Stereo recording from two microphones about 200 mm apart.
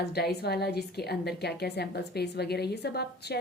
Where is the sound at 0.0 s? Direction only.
55° left (ahead or behind).